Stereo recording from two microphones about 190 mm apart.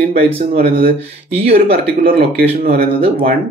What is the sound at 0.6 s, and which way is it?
Speech, 55° right (ahead or behind).